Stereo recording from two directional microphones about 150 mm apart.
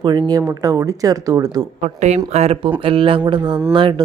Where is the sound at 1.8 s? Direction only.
50° right (ahead or behind).